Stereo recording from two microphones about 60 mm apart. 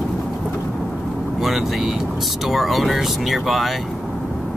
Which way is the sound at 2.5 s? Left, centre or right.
Centre.